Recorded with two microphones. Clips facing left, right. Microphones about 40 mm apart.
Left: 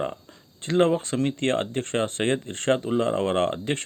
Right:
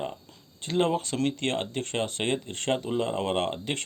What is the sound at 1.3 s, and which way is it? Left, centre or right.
Speech, left.